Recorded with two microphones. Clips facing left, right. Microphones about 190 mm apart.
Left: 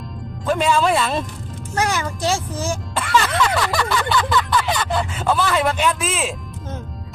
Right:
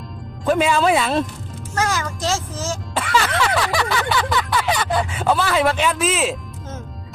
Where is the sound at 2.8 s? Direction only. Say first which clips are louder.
Left 1 dB; 5° right (ahead or behind).